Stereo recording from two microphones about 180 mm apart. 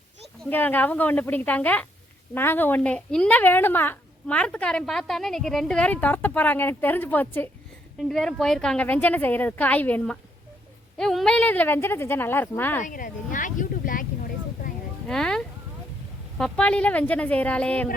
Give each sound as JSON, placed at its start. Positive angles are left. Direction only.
{"t": 0.5, "sound": "speech", "side_deg": 10}
{"t": 12.8, "sound": "speech", "side_deg": 50}
{"t": 14.6, "sound": "a sound", "side_deg": 45}
{"t": 15.0, "sound": "speech", "side_deg": 5}